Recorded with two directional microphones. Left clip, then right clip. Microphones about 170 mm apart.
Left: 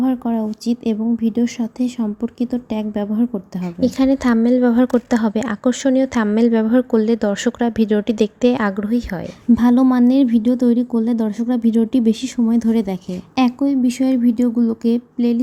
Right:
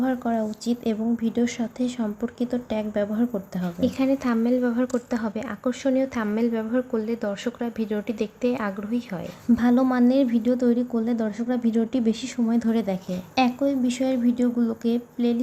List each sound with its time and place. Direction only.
0.0 s a woman's voice: 20° left (ahead or behind)
3.8 s a woman's voice: 35° left (ahead or behind)